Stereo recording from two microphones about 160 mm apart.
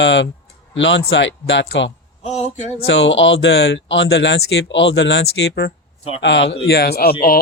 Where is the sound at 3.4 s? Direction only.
90° left.